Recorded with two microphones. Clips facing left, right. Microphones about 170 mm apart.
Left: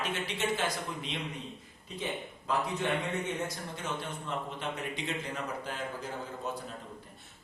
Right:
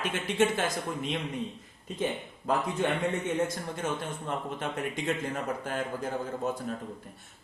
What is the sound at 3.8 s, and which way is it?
Speech, 50° right (ahead or behind).